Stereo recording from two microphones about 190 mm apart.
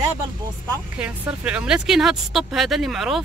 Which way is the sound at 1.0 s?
5° right (ahead or behind).